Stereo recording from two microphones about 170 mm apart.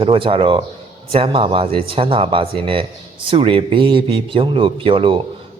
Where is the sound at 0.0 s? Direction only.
30° right (ahead or behind).